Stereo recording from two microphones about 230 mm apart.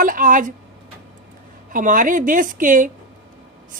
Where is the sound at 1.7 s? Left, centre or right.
Right.